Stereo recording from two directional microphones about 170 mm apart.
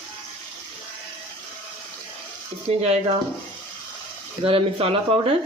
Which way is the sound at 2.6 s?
40° right (ahead or behind).